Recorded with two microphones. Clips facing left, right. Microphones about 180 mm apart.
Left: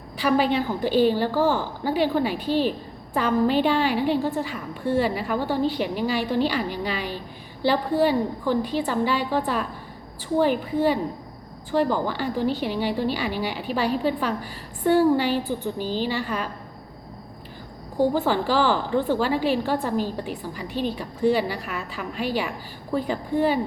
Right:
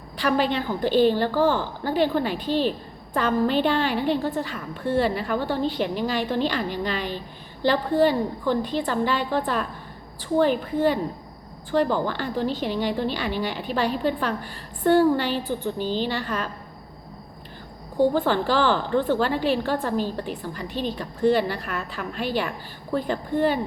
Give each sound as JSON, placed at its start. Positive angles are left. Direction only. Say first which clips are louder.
{"t": 0.2, "sound": "a woman's voice", "louder": "left 2 dB", "side_deg": 10}
{"t": 17.9, "sound": "a woman's voice", "louder": "right 1 dB", "side_deg": 10}